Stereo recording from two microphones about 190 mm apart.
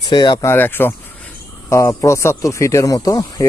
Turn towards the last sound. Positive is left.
turn(degrees=20)  # may be behind; listen again after turning